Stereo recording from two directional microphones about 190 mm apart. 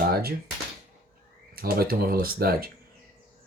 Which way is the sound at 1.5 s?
50° right (ahead or behind).